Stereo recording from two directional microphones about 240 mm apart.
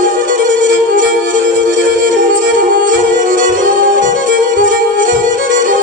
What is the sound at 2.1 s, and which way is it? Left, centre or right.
Music, right.